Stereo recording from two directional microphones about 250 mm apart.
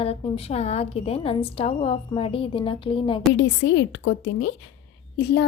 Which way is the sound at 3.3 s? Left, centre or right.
Left.